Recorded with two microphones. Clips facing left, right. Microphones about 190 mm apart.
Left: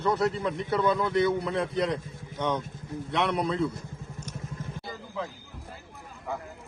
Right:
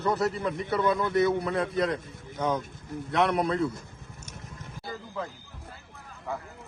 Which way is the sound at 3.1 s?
Centre (ahead or behind).